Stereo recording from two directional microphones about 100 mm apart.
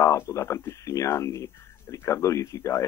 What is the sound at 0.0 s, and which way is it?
Speech, 30° left (ahead or behind).